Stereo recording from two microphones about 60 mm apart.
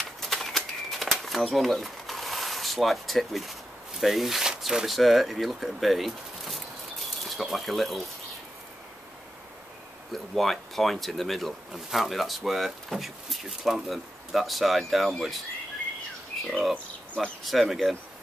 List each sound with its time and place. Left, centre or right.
0.2 s bird: centre
10.1 s speech: centre
16.7 s a sound: left
17.4 s speech: centre